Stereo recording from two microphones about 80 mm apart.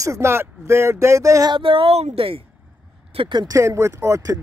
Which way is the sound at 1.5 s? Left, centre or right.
Right.